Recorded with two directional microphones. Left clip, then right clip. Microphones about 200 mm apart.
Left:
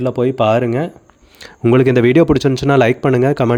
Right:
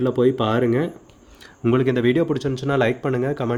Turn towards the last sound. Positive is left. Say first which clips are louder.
# left 9 dB
turn(degrees=50)  # may be behind; listen again after turning